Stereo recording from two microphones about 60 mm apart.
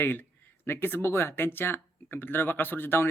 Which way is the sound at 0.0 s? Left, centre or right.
Left.